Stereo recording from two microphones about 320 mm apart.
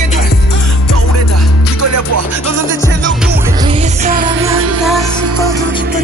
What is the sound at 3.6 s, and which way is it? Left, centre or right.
Music, centre.